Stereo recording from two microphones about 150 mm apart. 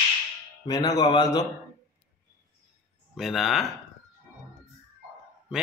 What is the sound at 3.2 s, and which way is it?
Speech, centre (ahead or behind).